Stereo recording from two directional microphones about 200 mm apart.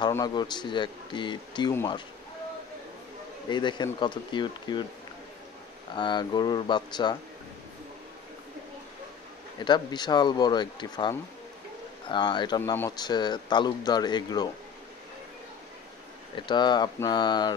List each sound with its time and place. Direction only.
0.1 s speech: 20° left (ahead or behind)
3.4 s speech: 20° left (ahead or behind)
5.9 s speech: 20° left (ahead or behind)
9.6 s speech: 20° left (ahead or behind)
16.3 s speech: 20° left (ahead or behind)